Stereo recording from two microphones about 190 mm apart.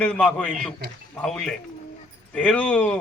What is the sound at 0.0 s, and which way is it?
A man's voice, 5° left (ahead or behind).